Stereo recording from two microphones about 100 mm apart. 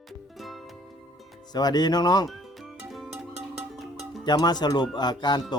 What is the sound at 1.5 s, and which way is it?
Speech, 45° left (ahead or behind).